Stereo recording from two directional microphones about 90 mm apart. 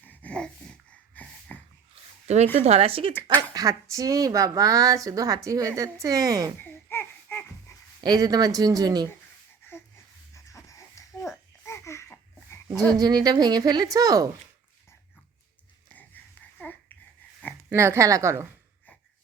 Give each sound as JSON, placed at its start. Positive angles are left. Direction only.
{"t": 0.0, "sound": "a sound", "side_deg": 20}
{"t": 2.8, "sound": "speech", "side_deg": -85}
{"t": 3.5, "sound": "speech", "side_deg": -40}
{"t": 6.6, "sound": "babbling", "side_deg": 25}
{"t": 8.0, "sound": "a woman's voice", "side_deg": -50}
{"t": 10.3, "sound": "a sound", "side_deg": 35}
{"t": 12.6, "sound": "a woman's voice", "side_deg": -50}
{"t": 16.0, "sound": "babbling", "side_deg": 20}
{"t": 17.7, "sound": "speech", "side_deg": -30}